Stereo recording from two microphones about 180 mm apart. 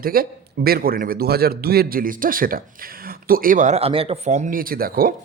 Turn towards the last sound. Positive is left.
turn(degrees=-55)  # may be behind; listen again after turning